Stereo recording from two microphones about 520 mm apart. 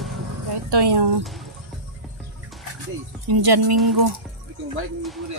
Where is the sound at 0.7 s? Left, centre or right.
Right.